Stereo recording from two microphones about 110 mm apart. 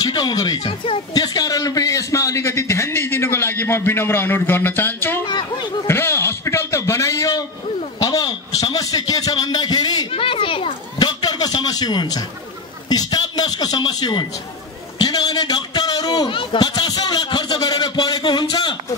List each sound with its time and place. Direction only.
0.0 s a man's voice: 40° left (ahead or behind); by 5.2 s 20° left (ahead or behind)
5.2 s speech: 45° left (ahead or behind)
5.9 s a sound: 20° left (ahead or behind)
8.0 s a man's voice: 35° left (ahead or behind)
10.1 s a man's voice: 55° left (ahead or behind)